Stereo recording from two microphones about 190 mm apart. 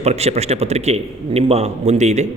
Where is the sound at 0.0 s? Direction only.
35° right (ahead or behind).